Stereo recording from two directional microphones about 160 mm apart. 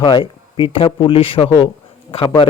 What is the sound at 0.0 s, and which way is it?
A man's voice, 30° left (ahead or behind).